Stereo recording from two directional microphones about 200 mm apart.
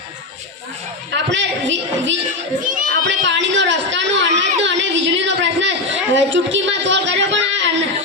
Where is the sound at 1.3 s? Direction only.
65° right (ahead or behind).